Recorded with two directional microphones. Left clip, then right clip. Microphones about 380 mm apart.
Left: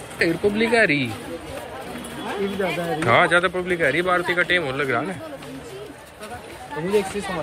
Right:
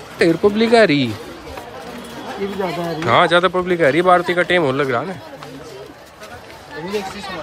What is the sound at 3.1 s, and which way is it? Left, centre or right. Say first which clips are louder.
Speech: right 4 dB; centre.